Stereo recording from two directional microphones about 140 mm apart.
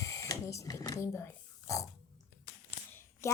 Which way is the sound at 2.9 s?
20° left (ahead or behind).